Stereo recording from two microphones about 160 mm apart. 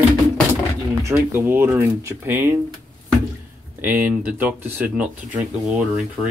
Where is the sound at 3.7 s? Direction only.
10° right (ahead or behind).